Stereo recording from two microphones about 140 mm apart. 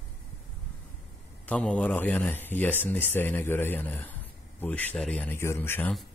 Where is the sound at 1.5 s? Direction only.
10° left (ahead or behind).